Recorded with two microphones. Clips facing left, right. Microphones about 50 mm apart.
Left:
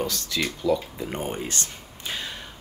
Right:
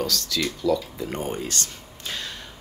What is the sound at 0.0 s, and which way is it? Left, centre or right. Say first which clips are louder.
Speech: right 1 dB; left.